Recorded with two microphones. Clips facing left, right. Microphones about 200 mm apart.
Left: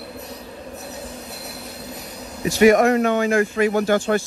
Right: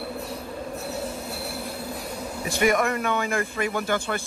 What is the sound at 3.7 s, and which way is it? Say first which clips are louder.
Speech: left 7 dB; 50° left (ahead or behind).